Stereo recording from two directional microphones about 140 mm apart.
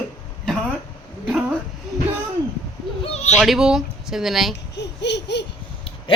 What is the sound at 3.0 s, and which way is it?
Bird, 50° left (ahead or behind).